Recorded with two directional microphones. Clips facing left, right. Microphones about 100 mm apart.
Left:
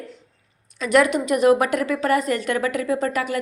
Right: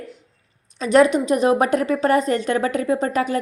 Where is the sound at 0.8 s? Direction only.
25° right (ahead or behind).